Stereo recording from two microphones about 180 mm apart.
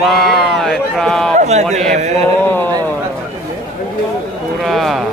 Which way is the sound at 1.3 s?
40° right (ahead or behind).